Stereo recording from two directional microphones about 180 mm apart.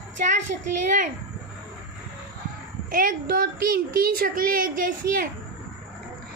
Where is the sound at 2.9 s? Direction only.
50° right (ahead or behind).